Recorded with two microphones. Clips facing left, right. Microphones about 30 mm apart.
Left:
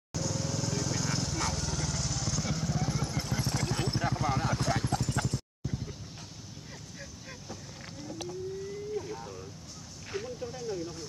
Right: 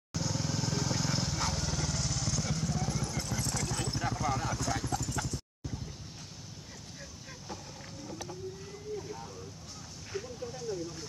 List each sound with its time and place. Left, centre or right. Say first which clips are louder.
0.1 s vehicle: left 1 dB; centre
4.8 s clip-clop: left 3 dB; left